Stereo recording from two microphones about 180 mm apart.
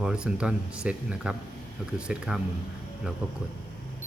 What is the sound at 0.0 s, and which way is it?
Speech, 5° right (ahead or behind).